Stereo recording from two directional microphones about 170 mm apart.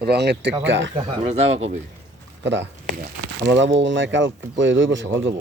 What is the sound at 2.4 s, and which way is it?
Speech, 90° right.